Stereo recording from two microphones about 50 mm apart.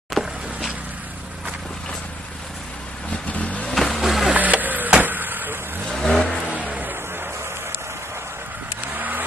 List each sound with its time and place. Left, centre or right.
0.1 s vehicle: centre
3.2 s vehicle: left
3.7 s vehicle: centre
4.4 s a sound: right
5.9 s vehicle: centre
6.7 s music: right
8.9 s vehicle: right